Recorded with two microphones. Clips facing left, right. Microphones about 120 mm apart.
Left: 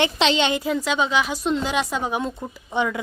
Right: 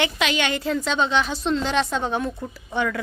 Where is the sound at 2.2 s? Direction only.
20° left (ahead or behind).